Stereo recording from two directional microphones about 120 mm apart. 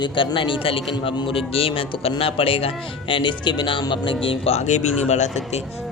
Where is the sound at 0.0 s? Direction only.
45° left (ahead or behind); by 5.3 s 70° left (ahead or behind).